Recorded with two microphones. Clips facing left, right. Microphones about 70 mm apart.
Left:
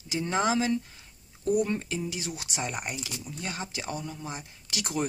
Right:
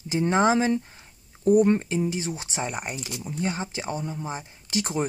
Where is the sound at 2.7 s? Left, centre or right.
Centre.